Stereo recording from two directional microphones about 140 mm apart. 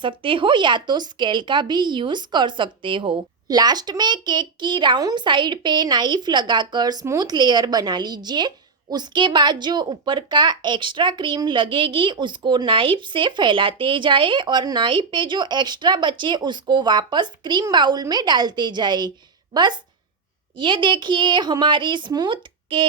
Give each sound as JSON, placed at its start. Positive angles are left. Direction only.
{"t": 0.0, "sound": "a woman's voice", "side_deg": -35}